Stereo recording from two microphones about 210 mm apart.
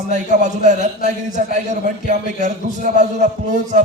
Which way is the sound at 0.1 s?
35° right (ahead or behind).